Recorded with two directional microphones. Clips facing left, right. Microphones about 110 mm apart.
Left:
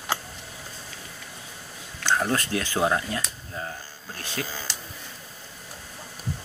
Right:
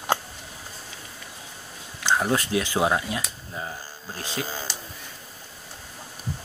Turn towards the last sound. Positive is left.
turn(degrees=-25)  # may be behind; listen again after turning